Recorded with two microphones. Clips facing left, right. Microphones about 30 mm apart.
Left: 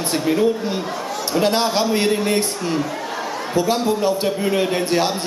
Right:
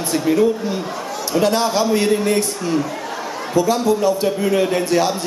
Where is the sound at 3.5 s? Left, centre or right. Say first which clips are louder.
Right 3 dB; left.